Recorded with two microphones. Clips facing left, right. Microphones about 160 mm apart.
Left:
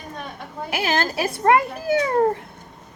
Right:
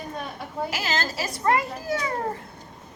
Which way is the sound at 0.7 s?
60° left (ahead or behind).